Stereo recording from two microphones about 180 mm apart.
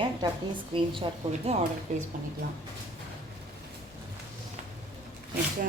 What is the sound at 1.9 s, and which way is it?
Speech, 40° right (ahead or behind).